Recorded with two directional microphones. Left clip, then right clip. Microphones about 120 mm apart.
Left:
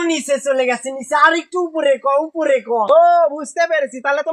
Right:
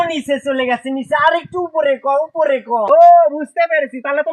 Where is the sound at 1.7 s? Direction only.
40° left (ahead or behind).